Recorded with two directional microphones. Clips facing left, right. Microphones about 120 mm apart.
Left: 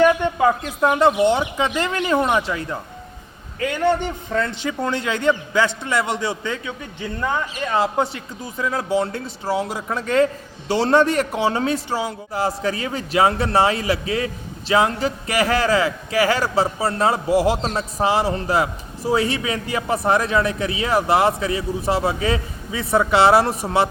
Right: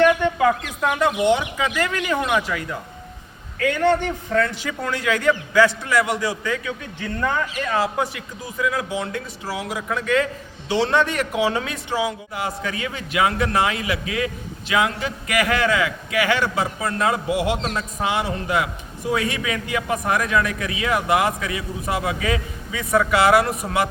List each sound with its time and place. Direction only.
0.4 s a man's voice: 25° left (ahead or behind)
3.7 s a man's voice: 15° left (ahead or behind)
4.4 s a man's voice: 25° left (ahead or behind)